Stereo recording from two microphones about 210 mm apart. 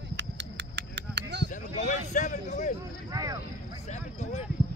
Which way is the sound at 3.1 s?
15° right (ahead or behind).